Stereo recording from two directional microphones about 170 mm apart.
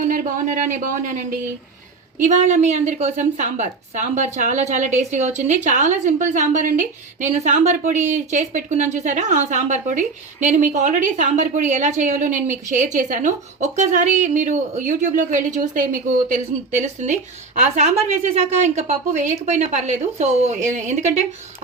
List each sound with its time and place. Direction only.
0.0 s a woman's voice: 50° right (ahead or behind)